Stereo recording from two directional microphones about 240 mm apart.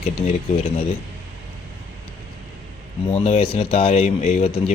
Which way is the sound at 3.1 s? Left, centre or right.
Left.